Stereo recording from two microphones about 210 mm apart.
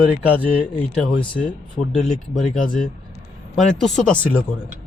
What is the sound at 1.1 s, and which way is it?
Speech, 25° left (ahead or behind).